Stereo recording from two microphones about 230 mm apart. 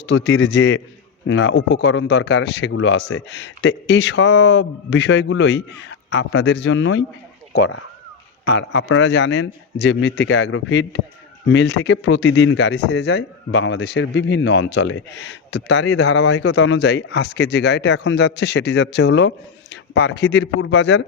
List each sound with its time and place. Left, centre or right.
0.0 s speech: left
8.7 s speech: left